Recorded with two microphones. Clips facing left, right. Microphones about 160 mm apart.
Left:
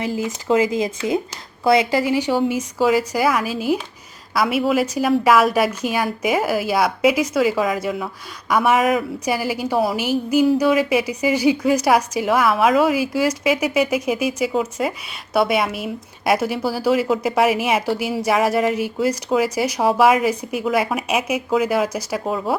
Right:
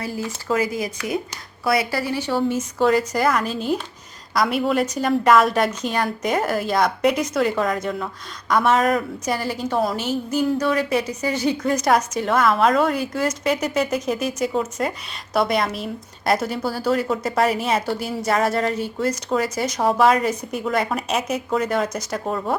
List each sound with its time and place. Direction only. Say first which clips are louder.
0.0 s a woman's voice: left 4 dB; 15° left (ahead or behind)